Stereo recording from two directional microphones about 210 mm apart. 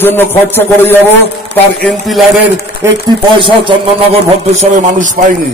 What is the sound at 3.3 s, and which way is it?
A man's voice, 25° right (ahead or behind).